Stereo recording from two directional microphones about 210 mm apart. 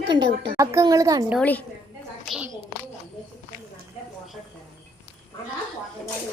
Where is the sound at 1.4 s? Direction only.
5° left (ahead or behind).